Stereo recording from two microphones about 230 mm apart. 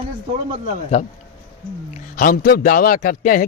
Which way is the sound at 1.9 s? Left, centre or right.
Left.